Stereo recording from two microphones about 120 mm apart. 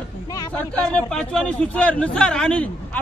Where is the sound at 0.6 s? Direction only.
10° left (ahead or behind).